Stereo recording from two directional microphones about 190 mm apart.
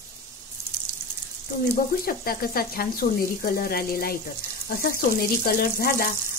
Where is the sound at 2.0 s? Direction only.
50° left (ahead or behind).